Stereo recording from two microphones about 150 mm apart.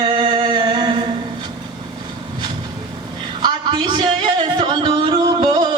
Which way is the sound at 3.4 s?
30° right (ahead or behind).